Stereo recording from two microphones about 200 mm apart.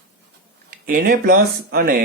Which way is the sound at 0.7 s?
45° right (ahead or behind).